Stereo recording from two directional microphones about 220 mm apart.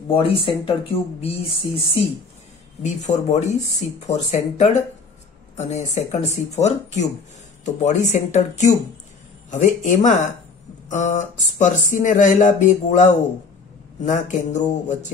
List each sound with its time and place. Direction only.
0.1 s speech: 25° left (ahead or behind)